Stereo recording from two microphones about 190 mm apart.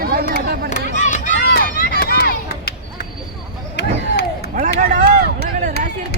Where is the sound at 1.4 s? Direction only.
50° left (ahead or behind).